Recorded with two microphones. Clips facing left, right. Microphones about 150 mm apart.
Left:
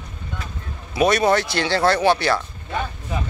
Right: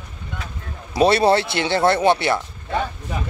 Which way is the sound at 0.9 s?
30° right (ahead or behind).